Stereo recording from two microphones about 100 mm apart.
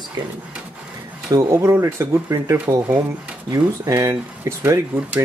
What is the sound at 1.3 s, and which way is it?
Speech, 30° right (ahead or behind).